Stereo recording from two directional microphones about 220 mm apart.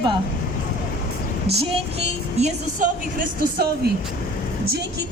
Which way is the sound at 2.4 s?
35° right (ahead or behind).